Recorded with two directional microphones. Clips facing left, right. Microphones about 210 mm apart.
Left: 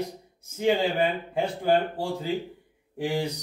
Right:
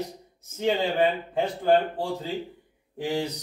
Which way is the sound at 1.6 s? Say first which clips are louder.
Right 2 dB; 10° left (ahead or behind).